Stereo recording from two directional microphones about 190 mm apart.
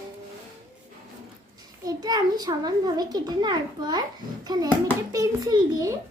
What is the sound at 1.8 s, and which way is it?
A child's voice, 20° right (ahead or behind).